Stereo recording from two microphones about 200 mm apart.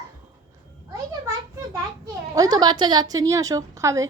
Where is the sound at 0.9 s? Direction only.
20° right (ahead or behind).